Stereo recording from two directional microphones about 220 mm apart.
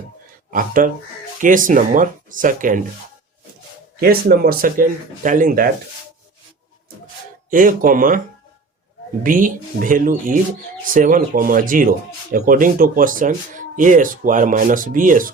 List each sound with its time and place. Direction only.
0.5 s speech: 40° right (ahead or behind)
4.0 s speech: 45° right (ahead or behind)
7.5 s speech: 40° right (ahead or behind)
9.2 s speech: 40° right (ahead or behind)